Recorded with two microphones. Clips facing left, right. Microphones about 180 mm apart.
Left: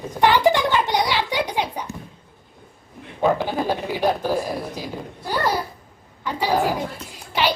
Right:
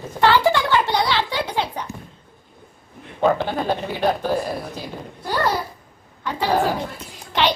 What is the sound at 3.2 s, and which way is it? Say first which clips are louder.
Speech: right 1 dB; 5° left (ahead or behind).